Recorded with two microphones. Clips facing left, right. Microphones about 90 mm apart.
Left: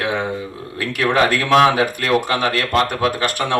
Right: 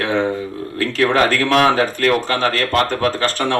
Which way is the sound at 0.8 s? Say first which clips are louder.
Right 1 dB; 15° left (ahead or behind).